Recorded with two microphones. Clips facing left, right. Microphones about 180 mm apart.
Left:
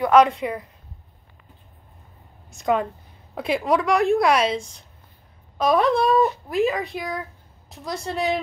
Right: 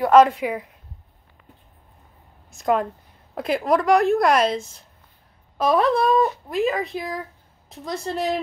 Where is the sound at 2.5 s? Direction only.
Centre (ahead or behind).